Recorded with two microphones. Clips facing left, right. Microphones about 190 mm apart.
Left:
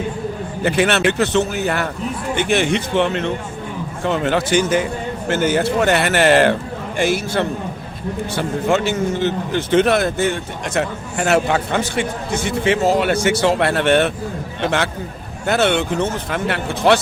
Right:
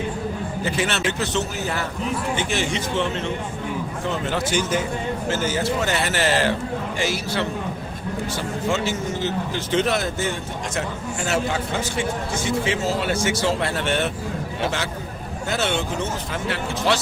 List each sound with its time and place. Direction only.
0.6 s a man's voice: 60° left (ahead or behind)
15.4 s a man's voice: 65° left (ahead or behind)